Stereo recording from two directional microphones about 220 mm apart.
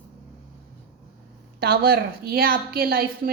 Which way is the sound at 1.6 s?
45° right (ahead or behind).